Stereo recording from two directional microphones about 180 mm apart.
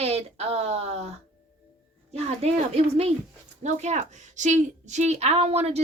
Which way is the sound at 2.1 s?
35° right (ahead or behind).